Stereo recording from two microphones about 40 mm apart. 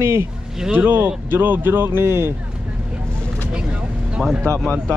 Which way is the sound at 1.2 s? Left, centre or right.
Right.